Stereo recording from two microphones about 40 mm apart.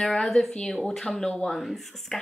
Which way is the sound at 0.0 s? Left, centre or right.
Centre.